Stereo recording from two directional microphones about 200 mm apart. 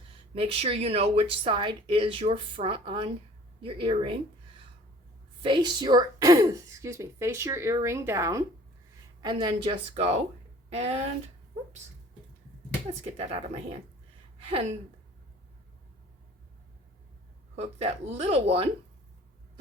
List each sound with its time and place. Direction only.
0.3 s speech: 30° right (ahead or behind)
5.4 s speech: 25° right (ahead or behind)
13.1 s speech: 30° right (ahead or behind)
17.6 s speech: 30° right (ahead or behind)